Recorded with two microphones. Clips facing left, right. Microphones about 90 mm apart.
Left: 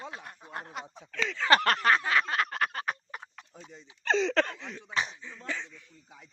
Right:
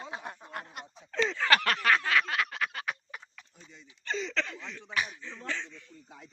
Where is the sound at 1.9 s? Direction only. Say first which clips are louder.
Left 1 dB; 25° left (ahead or behind); by 3.6 s 45° left (ahead or behind).